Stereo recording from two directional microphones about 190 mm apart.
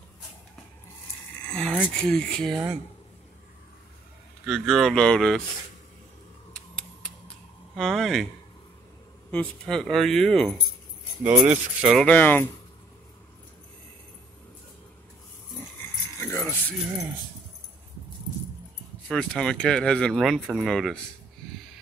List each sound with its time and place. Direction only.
1.4 s speech: 5° left (ahead or behind)
2.5 s speech: 10° right (ahead or behind)
4.5 s speech: centre (ahead or behind)
6.5 s a sound: 5° left (ahead or behind)
7.7 s speech: centre (ahead or behind)
9.3 s speech: 5° left (ahead or behind)
11.2 s speech: 10° right (ahead or behind); by 12.4 s 10° left (ahead or behind)
16.2 s keys jangling: 15° left (ahead or behind)
19.0 s speech: 5° left (ahead or behind)